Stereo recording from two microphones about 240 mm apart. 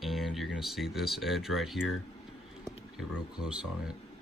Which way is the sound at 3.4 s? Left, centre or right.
Centre.